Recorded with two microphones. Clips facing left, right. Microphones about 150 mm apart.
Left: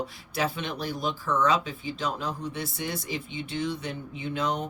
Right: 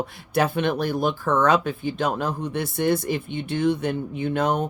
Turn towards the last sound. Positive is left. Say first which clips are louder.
# right 7 dB
turn(degrees=-55)  # may be behind; listen again after turning